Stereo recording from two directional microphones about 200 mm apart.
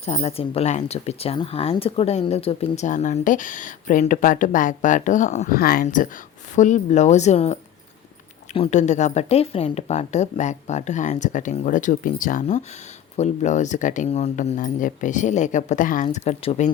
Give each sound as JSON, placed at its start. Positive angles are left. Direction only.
{"t": 0.0, "sound": "speech", "side_deg": 30}